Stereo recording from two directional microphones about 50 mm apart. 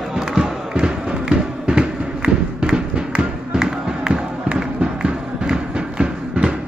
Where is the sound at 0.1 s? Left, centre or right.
Centre.